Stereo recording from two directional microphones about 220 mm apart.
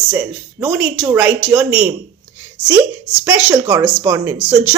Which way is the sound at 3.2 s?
10° right (ahead or behind).